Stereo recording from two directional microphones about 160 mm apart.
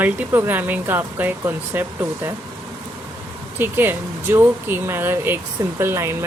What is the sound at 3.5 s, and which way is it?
Speech, 15° right (ahead or behind).